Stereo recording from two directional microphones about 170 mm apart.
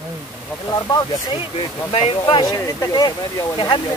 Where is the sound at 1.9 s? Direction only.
35° left (ahead or behind).